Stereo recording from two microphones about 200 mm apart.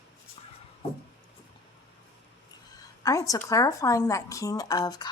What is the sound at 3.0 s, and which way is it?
Speech, 15° left (ahead or behind).